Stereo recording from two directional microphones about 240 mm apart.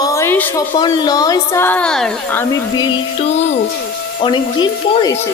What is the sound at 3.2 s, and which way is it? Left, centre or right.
Speech, left.